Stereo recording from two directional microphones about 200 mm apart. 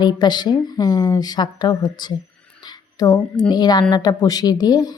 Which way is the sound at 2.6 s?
20° left (ahead or behind).